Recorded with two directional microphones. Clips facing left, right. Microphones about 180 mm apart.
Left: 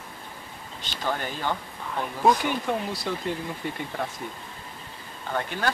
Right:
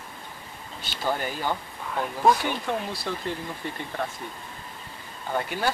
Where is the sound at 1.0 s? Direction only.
10° right (ahead or behind).